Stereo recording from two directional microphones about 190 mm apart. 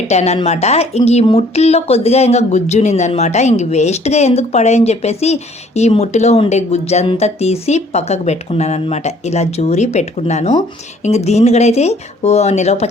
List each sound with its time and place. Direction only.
0.1 s speech: 35° left (ahead or behind)